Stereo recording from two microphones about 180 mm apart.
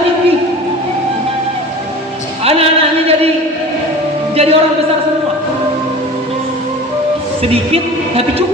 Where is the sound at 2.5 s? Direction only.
35° right (ahead or behind).